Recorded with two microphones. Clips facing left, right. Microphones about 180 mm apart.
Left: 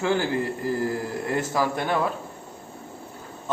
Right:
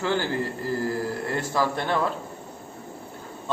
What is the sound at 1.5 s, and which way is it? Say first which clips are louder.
Speech: right 2 dB; 10° left (ahead or behind).